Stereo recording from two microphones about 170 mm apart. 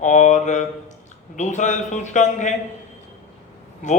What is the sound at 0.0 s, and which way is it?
Mantra, 45° left (ahead or behind).